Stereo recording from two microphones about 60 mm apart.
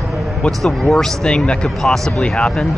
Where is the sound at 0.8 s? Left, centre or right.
Centre.